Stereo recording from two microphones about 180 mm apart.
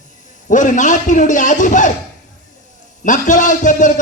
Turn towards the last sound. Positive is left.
turn(degrees=45)  # may be behind; listen again after turning